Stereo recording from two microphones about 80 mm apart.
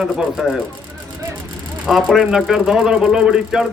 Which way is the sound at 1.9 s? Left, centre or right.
Centre.